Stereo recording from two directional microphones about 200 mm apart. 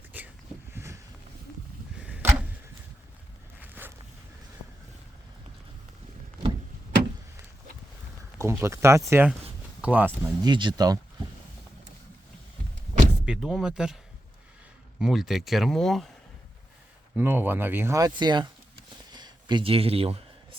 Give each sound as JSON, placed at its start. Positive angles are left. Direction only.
{"t": 0.1, "sound": "a sound", "side_deg": -10}
{"t": 3.6, "sound": "zipper", "side_deg": -10}
{"t": 8.4, "sound": "speech", "side_deg": -15}
{"t": 10.4, "sound": "speech", "side_deg": -25}
{"t": 13.2, "sound": "speech", "side_deg": -5}
{"t": 17.2, "sound": "speech", "side_deg": -10}
{"t": 19.1, "sound": "a sound", "side_deg": -20}